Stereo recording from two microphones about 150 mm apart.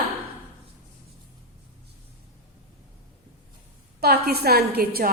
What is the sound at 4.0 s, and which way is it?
A woman's voice, 90° right.